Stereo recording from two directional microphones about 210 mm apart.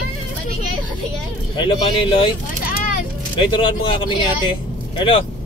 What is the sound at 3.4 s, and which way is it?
Speech, 25° left (ahead or behind).